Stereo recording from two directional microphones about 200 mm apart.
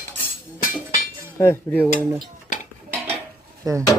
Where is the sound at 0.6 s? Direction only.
45° left (ahead or behind).